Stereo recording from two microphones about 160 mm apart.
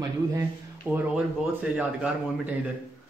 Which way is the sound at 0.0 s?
20° right (ahead or behind).